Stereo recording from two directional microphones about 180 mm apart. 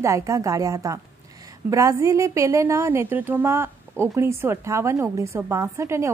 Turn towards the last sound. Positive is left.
turn(degrees=-15)  # may be behind; listen again after turning